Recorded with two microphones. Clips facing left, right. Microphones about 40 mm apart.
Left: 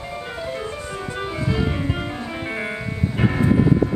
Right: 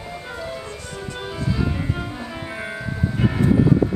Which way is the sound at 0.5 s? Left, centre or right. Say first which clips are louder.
Left 4 dB; left.